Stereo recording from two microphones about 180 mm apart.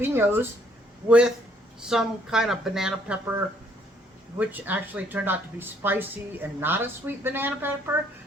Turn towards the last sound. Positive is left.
turn(degrees=-10)  # may be behind; listen again after turning